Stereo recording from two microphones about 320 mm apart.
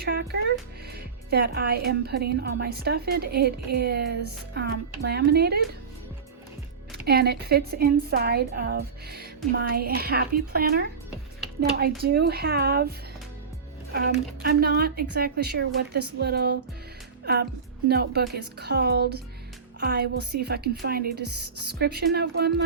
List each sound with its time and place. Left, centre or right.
0.0 s a woman's voice: right
7.0 s a woman's voice: right
14.4 s a woman's voice: right
17.8 s a woman's voice: right